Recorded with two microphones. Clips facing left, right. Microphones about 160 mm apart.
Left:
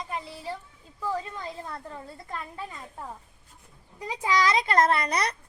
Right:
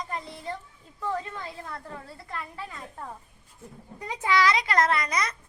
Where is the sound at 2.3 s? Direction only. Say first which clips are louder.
Even; 15° left (ahead or behind).